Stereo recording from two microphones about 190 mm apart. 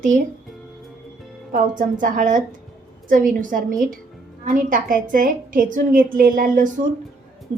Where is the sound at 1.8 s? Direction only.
45° right (ahead or behind).